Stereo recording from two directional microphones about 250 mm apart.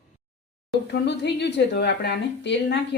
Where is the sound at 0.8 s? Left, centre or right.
Left.